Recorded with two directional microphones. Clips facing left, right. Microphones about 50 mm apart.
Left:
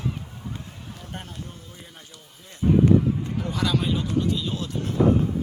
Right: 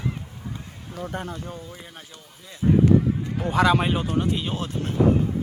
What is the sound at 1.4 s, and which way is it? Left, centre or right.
Speech, right.